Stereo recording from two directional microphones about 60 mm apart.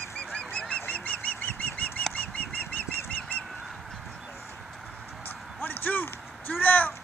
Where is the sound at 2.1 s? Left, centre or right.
Left.